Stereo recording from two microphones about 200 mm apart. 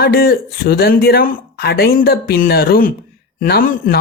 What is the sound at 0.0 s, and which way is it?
Speech, 50° left (ahead or behind).